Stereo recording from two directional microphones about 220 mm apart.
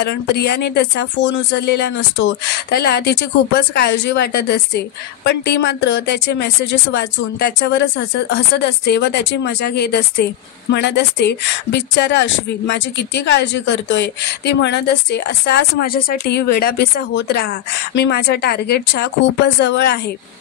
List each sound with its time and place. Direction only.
0.0 s speech: 50° left (ahead or behind)